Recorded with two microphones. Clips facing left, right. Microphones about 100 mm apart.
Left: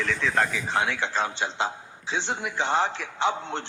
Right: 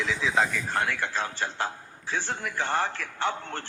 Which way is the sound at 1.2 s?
20° left (ahead or behind).